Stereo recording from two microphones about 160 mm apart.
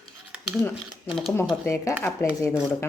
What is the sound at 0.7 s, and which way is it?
Speech, centre (ahead or behind).